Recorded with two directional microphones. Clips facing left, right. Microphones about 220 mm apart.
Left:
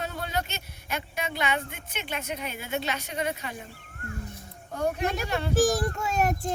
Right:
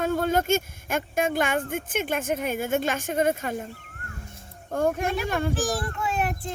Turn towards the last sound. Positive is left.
turn(degrees=40)  # may be behind; listen again after turning